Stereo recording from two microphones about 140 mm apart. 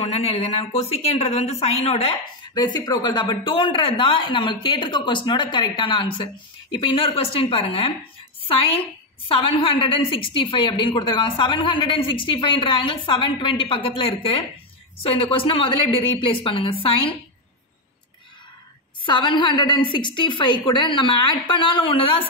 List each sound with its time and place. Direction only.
0.0 s speech: 45° left (ahead or behind)
2.5 s a woman's voice: 30° left (ahead or behind)
19.0 s a woman's voice: 35° left (ahead or behind)